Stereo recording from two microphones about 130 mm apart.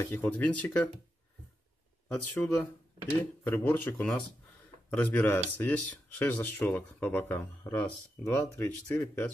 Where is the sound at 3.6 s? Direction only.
10° left (ahead or behind).